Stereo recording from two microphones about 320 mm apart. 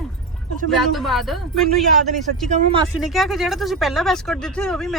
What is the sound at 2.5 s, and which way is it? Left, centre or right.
Speech, centre.